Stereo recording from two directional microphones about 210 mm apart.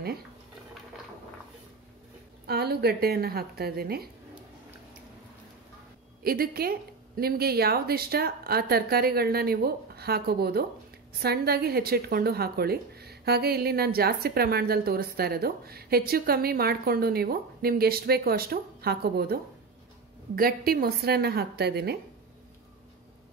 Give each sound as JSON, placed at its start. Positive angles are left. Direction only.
{"t": 2.4, "sound": "speech", "side_deg": -50}
{"t": 6.2, "sound": "speech", "side_deg": -45}